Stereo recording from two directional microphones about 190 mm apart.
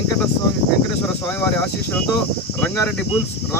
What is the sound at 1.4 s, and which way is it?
Speech, 10° left (ahead or behind).